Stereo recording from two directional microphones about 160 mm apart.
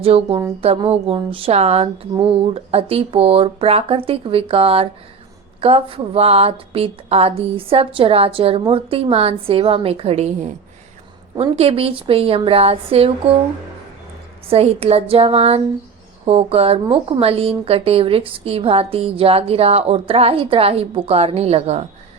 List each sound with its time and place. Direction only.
0.0 s a woman's voice: 35° right (ahead or behind)
14.5 s a woman's voice: 40° right (ahead or behind)